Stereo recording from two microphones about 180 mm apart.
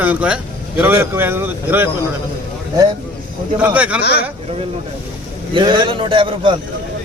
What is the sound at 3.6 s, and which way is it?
Speech, 5° right (ahead or behind).